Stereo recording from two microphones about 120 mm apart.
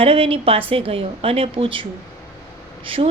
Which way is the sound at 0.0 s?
50° right (ahead or behind).